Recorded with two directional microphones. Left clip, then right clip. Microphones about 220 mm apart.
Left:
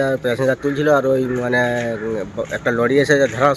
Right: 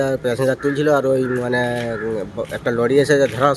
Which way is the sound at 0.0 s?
5° right (ahead or behind).